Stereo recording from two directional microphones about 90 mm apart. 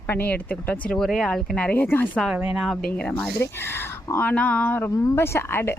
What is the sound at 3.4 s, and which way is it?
Speech, 25° left (ahead or behind).